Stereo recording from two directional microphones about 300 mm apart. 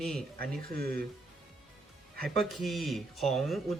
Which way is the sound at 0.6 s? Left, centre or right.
Right.